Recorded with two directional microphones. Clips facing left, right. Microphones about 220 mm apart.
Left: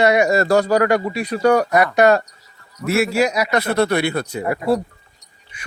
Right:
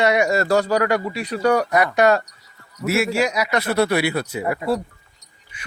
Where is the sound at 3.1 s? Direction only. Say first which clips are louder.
Left 3 dB; 40° left (ahead or behind).